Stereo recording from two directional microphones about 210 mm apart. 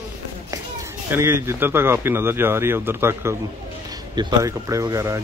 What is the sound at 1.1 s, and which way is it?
Speech, 10° right (ahead or behind).